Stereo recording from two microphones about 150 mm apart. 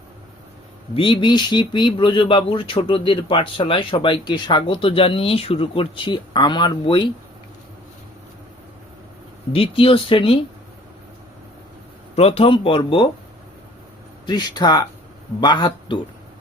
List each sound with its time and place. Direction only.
0.9 s speech: 35° left (ahead or behind)
9.5 s speech: 40° left (ahead or behind)
12.1 s speech: 40° left (ahead or behind)
14.3 s speech: 30° left (ahead or behind)